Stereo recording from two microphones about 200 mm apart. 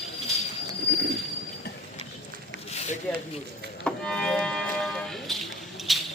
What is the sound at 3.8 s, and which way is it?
Music, 5° left (ahead or behind).